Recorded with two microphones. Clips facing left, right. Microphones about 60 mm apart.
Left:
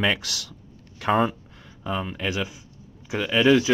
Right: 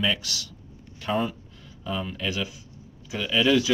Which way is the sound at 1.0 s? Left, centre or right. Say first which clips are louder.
Left 5 dB; left.